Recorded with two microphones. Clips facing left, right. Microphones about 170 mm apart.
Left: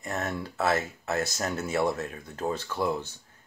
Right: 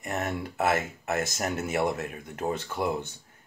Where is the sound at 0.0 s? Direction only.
20° right (ahead or behind).